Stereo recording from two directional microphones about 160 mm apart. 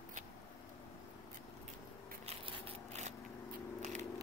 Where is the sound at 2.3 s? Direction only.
35° right (ahead or behind).